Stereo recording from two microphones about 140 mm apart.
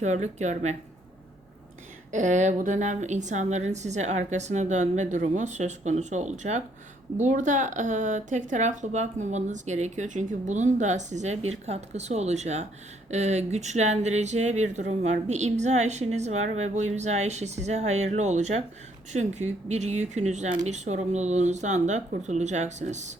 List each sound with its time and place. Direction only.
0.0 s speech: 55° right (ahead or behind)
2.1 s speech: 60° right (ahead or behind)